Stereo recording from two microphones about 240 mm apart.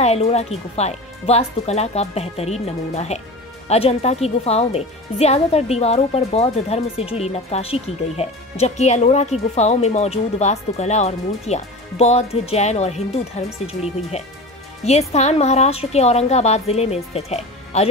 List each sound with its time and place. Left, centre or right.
0.0 s speech: left